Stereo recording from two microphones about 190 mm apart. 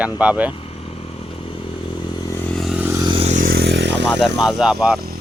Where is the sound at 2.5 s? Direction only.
Centre (ahead or behind).